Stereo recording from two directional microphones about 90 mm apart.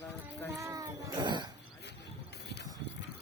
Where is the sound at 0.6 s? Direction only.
40° right (ahead or behind).